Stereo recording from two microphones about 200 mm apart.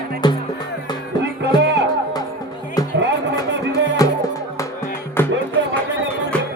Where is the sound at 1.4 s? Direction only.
60° right (ahead or behind).